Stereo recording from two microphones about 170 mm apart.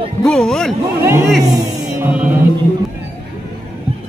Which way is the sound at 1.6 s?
10° right (ahead or behind).